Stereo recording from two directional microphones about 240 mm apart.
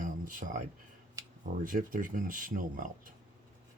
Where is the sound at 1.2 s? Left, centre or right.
Centre.